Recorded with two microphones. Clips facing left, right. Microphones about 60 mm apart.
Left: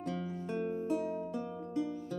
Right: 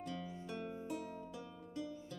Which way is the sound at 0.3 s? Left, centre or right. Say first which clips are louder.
Left 9 dB; left.